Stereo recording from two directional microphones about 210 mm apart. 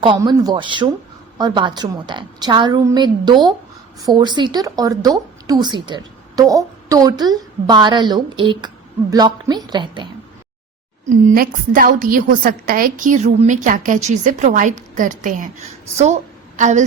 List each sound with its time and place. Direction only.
0.0 s a woman's voice: 20° right (ahead or behind)
11.3 s a woman's voice: 40° right (ahead or behind)
16.6 s a woman's voice: 35° right (ahead or behind)